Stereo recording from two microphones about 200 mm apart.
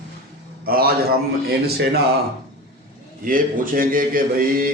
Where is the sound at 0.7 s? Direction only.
50° right (ahead or behind).